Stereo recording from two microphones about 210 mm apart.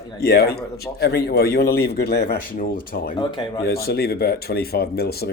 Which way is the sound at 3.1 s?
20° left (ahead or behind).